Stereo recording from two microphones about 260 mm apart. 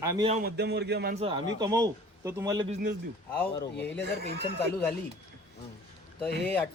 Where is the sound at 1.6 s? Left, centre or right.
Centre.